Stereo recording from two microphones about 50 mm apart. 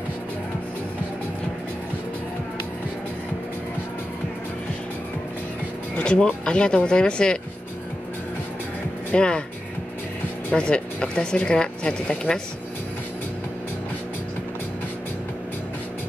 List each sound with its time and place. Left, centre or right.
5.9 s a woman's voice: centre
9.1 s a woman's voice: centre
10.5 s a woman's voice: centre